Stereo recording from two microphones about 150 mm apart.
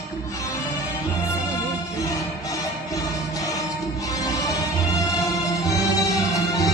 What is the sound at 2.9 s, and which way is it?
Music, 20° left (ahead or behind).